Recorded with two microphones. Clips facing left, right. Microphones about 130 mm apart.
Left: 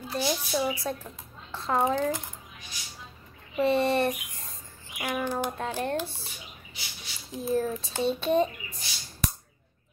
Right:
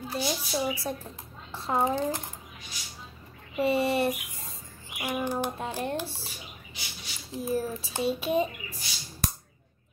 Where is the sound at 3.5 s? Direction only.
10° right (ahead or behind).